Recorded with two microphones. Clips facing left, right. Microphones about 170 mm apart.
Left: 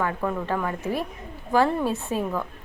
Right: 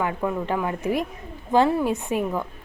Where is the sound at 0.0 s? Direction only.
15° right (ahead or behind).